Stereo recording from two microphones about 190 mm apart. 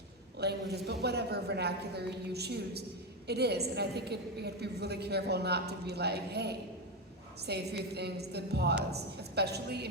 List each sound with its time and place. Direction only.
0.3 s a woman's voice: 60° right (ahead or behind)